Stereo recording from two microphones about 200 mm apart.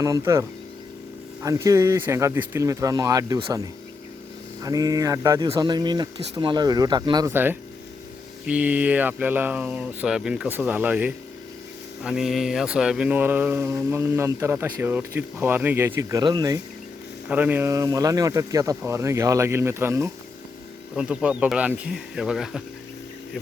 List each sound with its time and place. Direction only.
0.0 s speech: 15° right (ahead or behind)
17.2 s speech: 10° right (ahead or behind)